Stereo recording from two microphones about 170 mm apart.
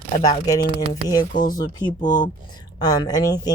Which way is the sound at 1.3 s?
55° left (ahead or behind).